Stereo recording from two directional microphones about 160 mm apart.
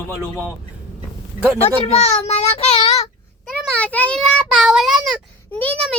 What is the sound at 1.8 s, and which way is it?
Child singing, 40° left (ahead or behind).